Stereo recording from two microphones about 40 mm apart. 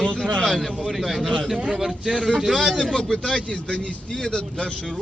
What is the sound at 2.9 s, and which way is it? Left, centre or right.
Speech, centre.